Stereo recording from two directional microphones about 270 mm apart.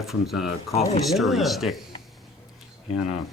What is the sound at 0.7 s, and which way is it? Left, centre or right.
Speech, left.